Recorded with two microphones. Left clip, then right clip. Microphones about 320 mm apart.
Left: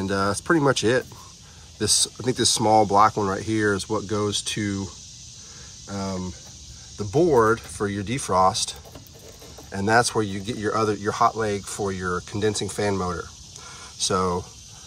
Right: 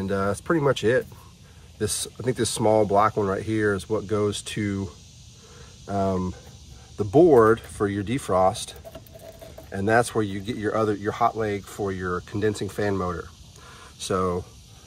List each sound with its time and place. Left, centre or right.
0.0 s speech: centre